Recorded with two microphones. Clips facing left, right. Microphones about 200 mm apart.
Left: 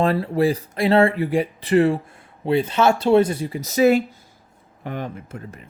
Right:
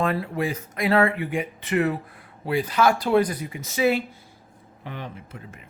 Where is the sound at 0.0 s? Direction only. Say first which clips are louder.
Left 6 dB; 35° left (ahead or behind).